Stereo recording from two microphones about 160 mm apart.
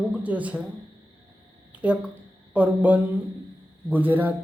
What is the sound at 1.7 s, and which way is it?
Speech, 10° right (ahead or behind).